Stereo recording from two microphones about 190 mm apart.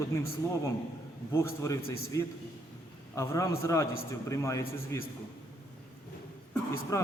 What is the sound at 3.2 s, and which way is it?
A man's voice, 15° left (ahead or behind).